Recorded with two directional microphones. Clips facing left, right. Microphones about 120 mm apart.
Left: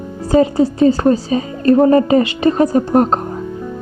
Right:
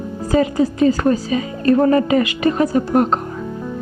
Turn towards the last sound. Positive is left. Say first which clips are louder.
# left 3 dB
turn(degrees=40)  # may be behind; listen again after turning